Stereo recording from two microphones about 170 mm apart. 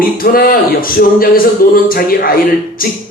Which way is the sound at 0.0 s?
60° left (ahead or behind).